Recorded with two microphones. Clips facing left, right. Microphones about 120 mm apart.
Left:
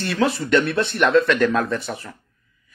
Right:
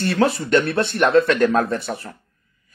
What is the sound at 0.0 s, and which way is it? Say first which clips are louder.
Speech: right 2 dB; 45° right (ahead or behind).